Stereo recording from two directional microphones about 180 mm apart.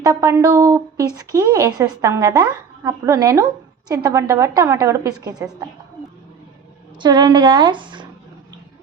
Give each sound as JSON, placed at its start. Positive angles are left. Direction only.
{"t": 0.0, "sound": "a woman's voice", "side_deg": -20}
{"t": 7.0, "sound": "speech", "side_deg": -25}